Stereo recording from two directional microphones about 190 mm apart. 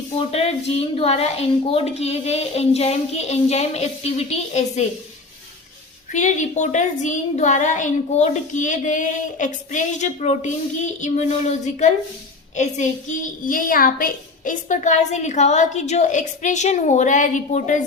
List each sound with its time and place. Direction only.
0.3 s a child's voice: 30° left (ahead or behind)
6.1 s a child's voice: 40° left (ahead or behind)